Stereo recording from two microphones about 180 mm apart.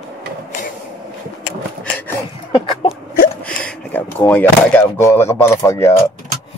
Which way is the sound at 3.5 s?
5° left (ahead or behind).